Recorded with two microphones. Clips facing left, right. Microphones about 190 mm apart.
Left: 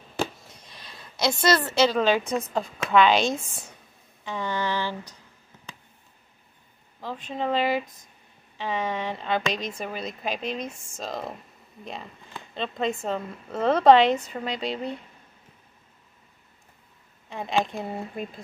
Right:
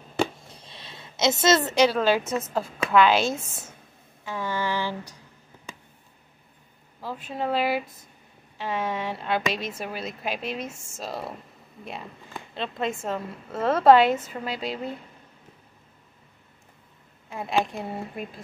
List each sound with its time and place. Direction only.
0.5 s a sound: 30° right (ahead or behind)
2.0 s a woman's voice: 5° right (ahead or behind)
4.2 s a sound: 5° right (ahead or behind)
7.0 s a woman's voice: 5° right (ahead or behind)
12.5 s a woman's voice: 5° right (ahead or behind)
17.3 s a woman's voice: 5° right (ahead or behind)